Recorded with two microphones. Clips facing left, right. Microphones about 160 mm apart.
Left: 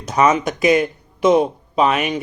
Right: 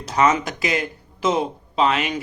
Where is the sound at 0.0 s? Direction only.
20° left (ahead or behind).